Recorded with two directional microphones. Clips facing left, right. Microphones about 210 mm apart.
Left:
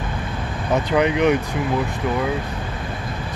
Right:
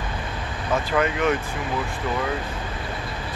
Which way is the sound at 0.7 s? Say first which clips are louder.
Left 5 dB; 20° left (ahead or behind).